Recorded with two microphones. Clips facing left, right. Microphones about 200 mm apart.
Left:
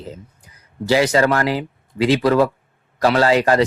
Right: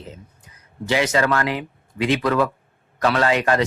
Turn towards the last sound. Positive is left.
turn(degrees=30)  # may be behind; listen again after turning